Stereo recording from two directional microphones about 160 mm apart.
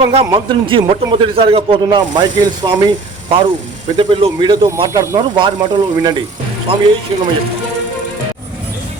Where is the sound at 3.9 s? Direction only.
30° right (ahead or behind).